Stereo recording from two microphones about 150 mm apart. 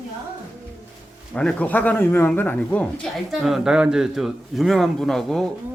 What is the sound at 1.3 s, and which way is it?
Speech, 10° left (ahead or behind).